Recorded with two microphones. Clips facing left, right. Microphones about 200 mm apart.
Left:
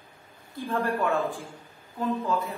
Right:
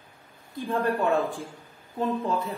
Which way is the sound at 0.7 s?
15° right (ahead or behind).